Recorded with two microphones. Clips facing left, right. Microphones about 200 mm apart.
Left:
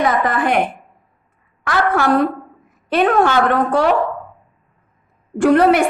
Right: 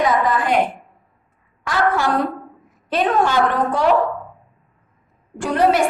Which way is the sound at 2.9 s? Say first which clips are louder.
Left 3 dB; 60° left (ahead or behind).